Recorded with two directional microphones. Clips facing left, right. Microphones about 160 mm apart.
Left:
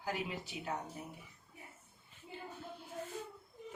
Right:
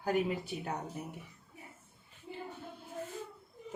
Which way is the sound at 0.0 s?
55° right (ahead or behind).